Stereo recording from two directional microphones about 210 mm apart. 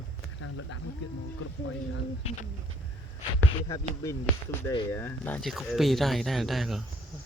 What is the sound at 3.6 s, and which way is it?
Speech, 15° left (ahead or behind).